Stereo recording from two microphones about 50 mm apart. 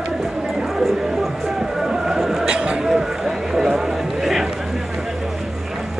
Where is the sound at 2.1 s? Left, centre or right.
Centre.